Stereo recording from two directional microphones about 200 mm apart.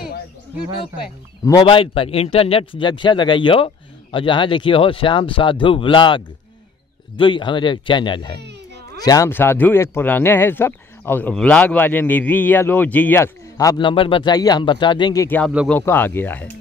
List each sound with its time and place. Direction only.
1.4 s a man's voice: 20° left (ahead or behind)
15.2 s speech: 10° left (ahead or behind)